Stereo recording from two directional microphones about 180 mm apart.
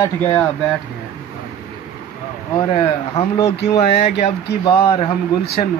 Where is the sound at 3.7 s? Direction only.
40° left (ahead or behind).